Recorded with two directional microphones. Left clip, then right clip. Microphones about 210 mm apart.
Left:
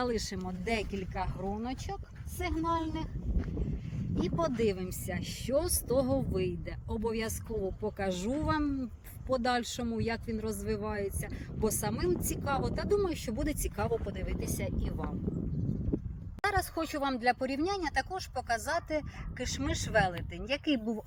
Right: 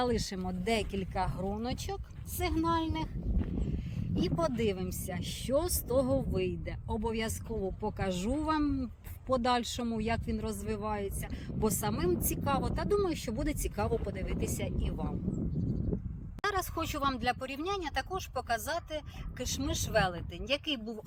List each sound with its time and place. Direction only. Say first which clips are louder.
0.0 s speech: right 1 dB; 30° right (ahead or behind)
4.1 s a man's voice: even; 45° right (ahead or behind); by 15.0 s 20° right (ahead or behind)
16.4 s speech: left 2 dB; 30° left (ahead or behind)